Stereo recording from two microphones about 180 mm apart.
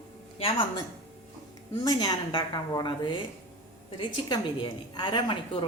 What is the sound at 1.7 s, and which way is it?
A woman's voice, 20° left (ahead or behind).